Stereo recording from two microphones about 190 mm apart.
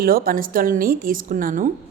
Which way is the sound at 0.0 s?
50° right (ahead or behind).